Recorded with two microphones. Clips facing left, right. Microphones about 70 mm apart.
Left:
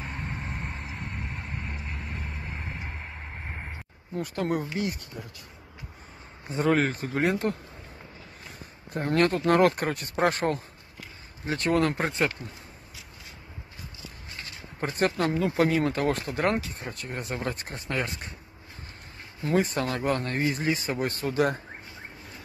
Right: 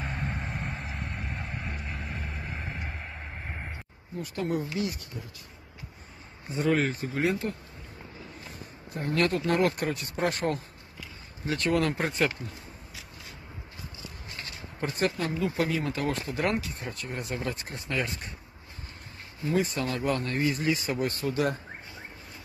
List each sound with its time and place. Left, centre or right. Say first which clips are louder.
0.0 s vehicle: right 2 dB; centre
4.2 s speech: left 2 dB; left
6.5 s speech: left 2 dB; left
8.9 s speech: left 3 dB; left
14.8 s speech: left 3 dB; left
19.4 s speech: left 2 dB; left